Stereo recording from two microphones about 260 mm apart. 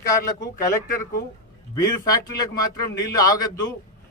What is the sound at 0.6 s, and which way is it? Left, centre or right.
Speech, left.